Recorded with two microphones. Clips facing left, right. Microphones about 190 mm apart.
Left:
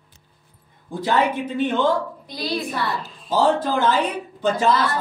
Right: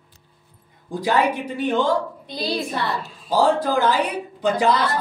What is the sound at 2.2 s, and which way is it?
Speech, 25° right (ahead or behind).